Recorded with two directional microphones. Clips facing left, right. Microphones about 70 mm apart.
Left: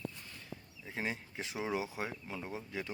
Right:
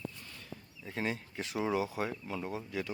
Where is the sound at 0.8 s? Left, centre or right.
Centre.